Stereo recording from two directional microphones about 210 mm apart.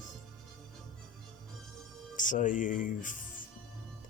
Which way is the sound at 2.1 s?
40° left (ahead or behind).